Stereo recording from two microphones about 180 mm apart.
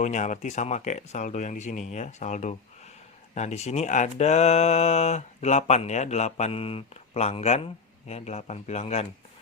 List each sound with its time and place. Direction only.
0.0 s speech: 40° left (ahead or behind)